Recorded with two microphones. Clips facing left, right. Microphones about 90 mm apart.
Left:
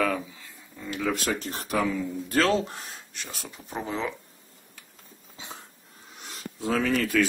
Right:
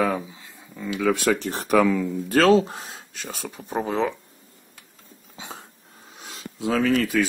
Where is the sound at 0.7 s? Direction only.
70° right (ahead or behind).